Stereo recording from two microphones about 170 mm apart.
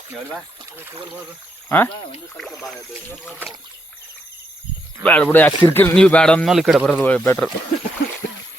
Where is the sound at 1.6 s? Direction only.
10° left (ahead or behind).